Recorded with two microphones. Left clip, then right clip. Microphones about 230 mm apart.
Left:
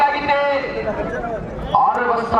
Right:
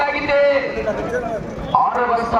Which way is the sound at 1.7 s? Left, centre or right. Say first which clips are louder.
Left 1 dB; centre.